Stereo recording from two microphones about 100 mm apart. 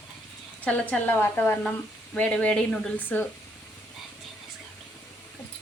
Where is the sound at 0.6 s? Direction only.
15° left (ahead or behind).